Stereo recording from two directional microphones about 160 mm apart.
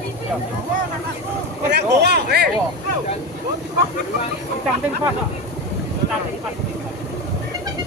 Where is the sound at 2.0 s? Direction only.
90° right.